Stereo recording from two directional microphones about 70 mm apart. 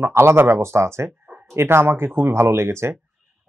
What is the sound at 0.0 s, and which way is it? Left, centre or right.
Speech, right.